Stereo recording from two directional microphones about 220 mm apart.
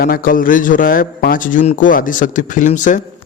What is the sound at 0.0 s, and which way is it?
A man's voice, 40° left (ahead or behind).